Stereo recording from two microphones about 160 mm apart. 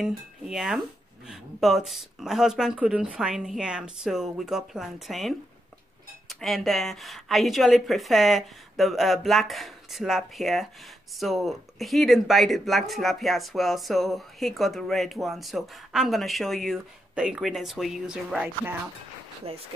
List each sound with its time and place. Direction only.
0.0 s speech: centre (ahead or behind)
19.4 s speech: 40° right (ahead or behind)